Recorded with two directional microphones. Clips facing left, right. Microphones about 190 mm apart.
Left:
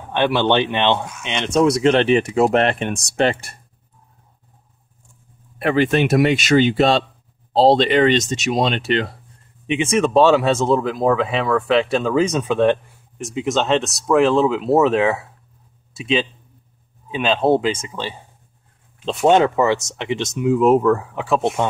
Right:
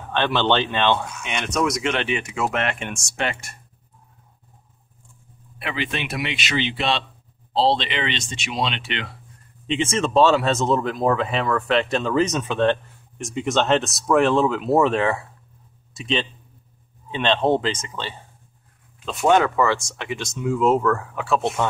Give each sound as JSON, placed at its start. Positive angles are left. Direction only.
{"t": 0.1, "sound": "speech", "side_deg": 15}
{"t": 5.6, "sound": "speech", "side_deg": 45}
{"t": 9.7, "sound": "speech", "side_deg": 15}
{"t": 19.0, "sound": "speech", "side_deg": 25}